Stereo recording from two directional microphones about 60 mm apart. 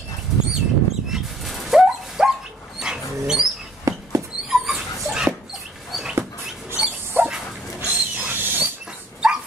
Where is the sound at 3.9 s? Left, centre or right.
Right.